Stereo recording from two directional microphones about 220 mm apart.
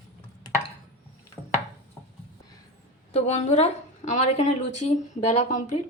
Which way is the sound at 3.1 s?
30° left (ahead or behind).